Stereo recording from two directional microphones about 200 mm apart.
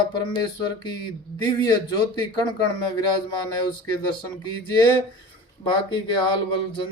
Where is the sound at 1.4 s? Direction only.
20° left (ahead or behind).